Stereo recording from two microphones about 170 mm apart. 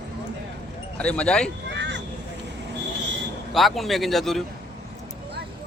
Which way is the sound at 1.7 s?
90° right.